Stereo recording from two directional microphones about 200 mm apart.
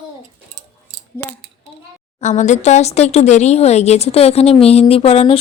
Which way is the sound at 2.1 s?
35° left (ahead or behind).